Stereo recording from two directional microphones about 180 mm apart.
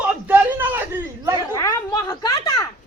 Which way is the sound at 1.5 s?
20° left (ahead or behind).